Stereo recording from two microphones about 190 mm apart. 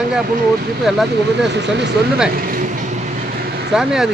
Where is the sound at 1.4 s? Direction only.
65° right (ahead or behind).